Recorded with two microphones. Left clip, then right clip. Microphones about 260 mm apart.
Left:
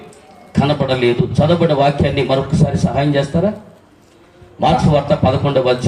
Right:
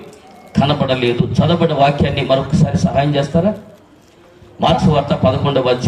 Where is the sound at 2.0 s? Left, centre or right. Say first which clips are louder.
Even; centre.